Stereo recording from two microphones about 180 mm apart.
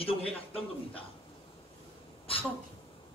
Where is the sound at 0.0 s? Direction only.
30° left (ahead or behind).